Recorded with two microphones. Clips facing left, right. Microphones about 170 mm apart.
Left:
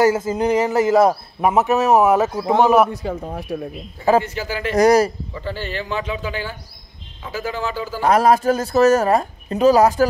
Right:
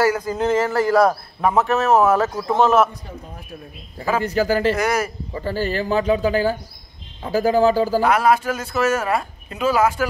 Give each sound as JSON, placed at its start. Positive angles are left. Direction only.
{"t": 0.0, "sound": "a man's voice", "side_deg": 20}
{"t": 2.9, "sound": "speech", "side_deg": 70}
{"t": 4.2, "sound": "speech", "side_deg": -40}
{"t": 4.7, "sound": "speech", "side_deg": 35}
{"t": 5.3, "sound": "speech", "side_deg": -40}
{"t": 8.0, "sound": "speech", "side_deg": 40}